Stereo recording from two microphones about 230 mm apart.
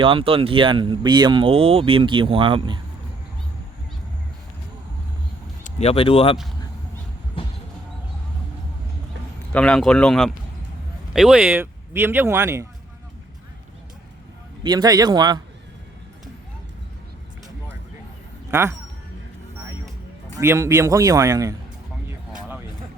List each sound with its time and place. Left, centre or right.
0.0 s speech: right
5.6 s speech: left
7.4 s basketball bounce: left
9.5 s speech: centre
14.6 s speech: centre
20.4 s speech: centre
22.3 s music: centre